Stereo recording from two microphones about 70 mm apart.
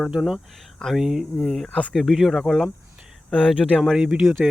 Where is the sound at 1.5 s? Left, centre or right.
Centre.